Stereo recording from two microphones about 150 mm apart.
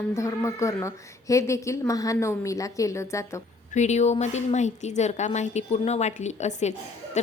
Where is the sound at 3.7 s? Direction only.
50° left (ahead or behind).